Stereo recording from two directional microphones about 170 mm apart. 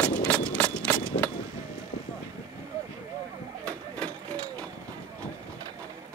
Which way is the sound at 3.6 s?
5° left (ahead or behind).